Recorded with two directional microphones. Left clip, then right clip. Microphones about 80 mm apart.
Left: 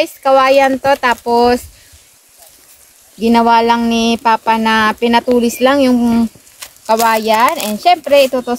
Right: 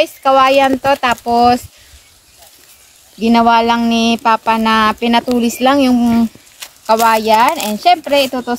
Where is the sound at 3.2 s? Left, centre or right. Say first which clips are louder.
Even; left.